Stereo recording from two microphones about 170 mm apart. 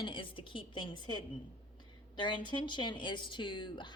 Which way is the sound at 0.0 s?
30° left (ahead or behind).